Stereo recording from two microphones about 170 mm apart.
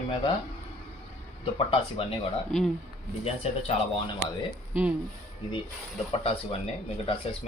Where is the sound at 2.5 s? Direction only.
Centre (ahead or behind).